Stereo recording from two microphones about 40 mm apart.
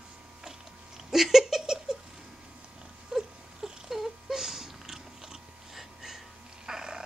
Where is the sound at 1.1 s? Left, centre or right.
Centre.